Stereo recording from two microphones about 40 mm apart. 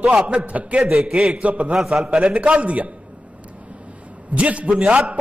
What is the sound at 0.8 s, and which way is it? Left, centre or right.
Speech, centre.